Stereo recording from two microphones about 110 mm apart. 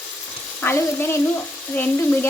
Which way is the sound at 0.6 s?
20° left (ahead or behind).